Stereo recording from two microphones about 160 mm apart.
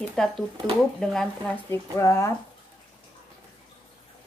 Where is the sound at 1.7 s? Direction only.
20° left (ahead or behind).